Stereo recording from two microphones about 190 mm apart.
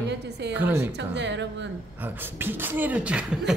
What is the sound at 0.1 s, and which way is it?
Speech, 65° right (ahead or behind).